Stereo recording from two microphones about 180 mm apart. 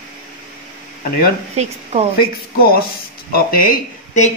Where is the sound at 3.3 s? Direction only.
55° left (ahead or behind).